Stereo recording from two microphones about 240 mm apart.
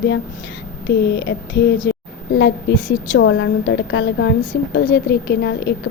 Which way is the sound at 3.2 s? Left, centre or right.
Left.